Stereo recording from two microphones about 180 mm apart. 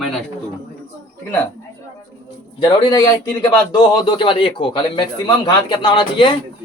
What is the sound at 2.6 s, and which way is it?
A man's voice, 25° left (ahead or behind).